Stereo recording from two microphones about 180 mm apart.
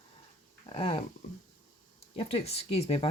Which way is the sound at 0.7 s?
30° left (ahead or behind).